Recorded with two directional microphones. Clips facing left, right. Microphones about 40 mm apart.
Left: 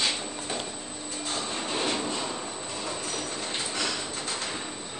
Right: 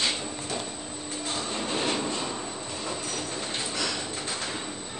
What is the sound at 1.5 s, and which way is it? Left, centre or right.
Vehicle, centre.